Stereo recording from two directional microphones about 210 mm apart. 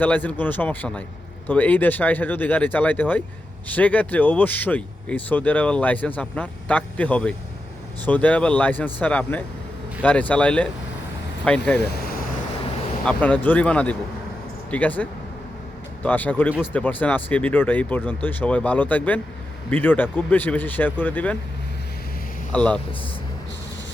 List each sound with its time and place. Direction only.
0.0 s speech: 10° left (ahead or behind)
11.8 s speech: 50° left (ahead or behind)
13.1 s speech: 5° left (ahead or behind)
16.0 s speech: 10° left (ahead or behind)
22.5 s speech: 5° left (ahead or behind)